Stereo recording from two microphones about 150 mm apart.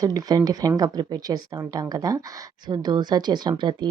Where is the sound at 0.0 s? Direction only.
25° right (ahead or behind).